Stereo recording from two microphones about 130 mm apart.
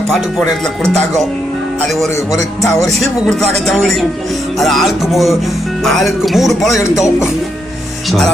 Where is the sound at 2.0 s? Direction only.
25° left (ahead or behind).